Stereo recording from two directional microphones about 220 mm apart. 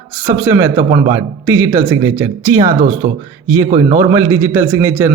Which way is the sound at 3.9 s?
10° right (ahead or behind).